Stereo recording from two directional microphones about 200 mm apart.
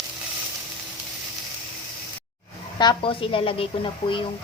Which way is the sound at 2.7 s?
25° left (ahead or behind).